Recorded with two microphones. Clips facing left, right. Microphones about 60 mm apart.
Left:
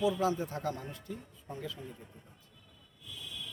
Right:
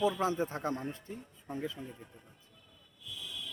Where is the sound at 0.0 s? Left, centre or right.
Right.